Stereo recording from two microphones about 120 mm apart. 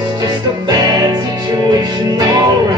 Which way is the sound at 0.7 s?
35° right (ahead or behind).